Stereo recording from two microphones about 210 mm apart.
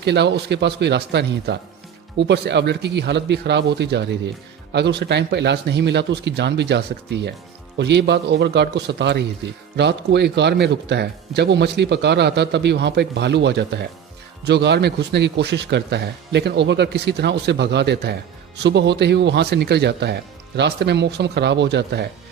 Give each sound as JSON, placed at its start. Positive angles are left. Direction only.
{"t": 0.0, "sound": "speech", "side_deg": -55}